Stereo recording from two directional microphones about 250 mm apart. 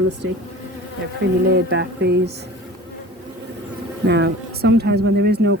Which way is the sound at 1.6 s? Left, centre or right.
Right.